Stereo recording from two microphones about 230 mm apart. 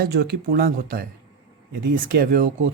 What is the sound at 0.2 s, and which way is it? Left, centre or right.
Speech, right.